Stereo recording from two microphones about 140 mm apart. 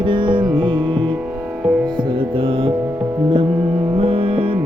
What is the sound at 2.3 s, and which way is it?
Music, 40° right (ahead or behind).